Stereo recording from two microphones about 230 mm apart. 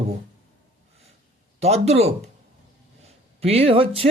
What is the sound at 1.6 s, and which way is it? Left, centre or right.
Speech, right.